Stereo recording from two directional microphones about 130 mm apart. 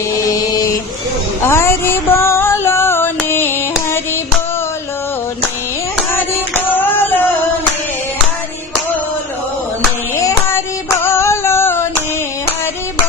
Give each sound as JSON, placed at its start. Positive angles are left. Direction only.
{"t": 1.4, "sound": "a sound", "side_deg": 20}
{"t": 6.1, "sound": "child singing", "side_deg": 15}
{"t": 10.2, "sound": "child singing", "side_deg": 25}